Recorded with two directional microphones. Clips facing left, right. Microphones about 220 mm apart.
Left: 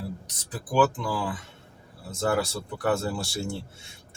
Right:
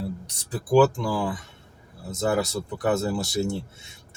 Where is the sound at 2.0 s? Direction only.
20° right (ahead or behind).